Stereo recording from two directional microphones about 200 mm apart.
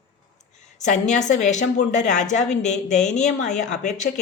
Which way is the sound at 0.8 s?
35° left (ahead or behind).